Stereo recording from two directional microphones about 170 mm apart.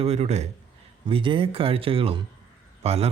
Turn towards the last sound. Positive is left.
turn(degrees=-35)  # may be behind; listen again after turning